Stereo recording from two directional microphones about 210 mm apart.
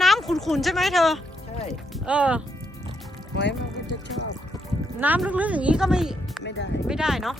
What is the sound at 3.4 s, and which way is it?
Music, 55° left (ahead or behind).